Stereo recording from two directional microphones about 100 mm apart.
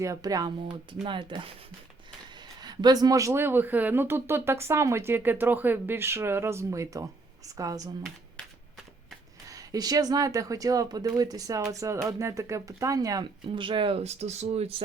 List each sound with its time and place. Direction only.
0.0 s speech: 35° right (ahead or behind)
1.0 s speech: 55° right (ahead or behind)
2.6 s speech: 45° right (ahead or behind)
9.5 s speech: 40° right (ahead or behind)
13.6 s speech: 55° right (ahead or behind); by 14.8 s 80° right